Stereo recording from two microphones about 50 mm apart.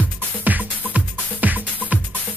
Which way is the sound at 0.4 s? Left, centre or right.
Right.